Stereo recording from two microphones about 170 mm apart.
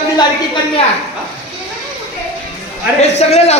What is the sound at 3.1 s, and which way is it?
Speech, 40° left (ahead or behind).